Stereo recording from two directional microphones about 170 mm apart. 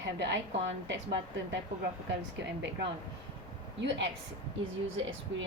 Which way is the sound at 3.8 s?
90° right.